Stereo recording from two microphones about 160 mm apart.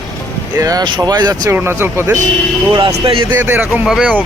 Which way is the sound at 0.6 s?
25° right (ahead or behind).